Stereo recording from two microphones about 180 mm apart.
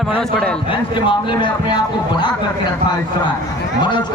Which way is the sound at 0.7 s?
25° left (ahead or behind).